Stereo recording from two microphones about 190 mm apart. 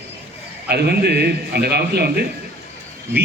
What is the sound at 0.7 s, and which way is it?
A man's voice, 60° right (ahead or behind).